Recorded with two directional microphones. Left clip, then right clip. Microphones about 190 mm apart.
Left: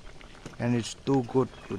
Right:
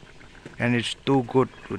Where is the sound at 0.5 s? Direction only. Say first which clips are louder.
Right 6 dB; 5° right (ahead or behind).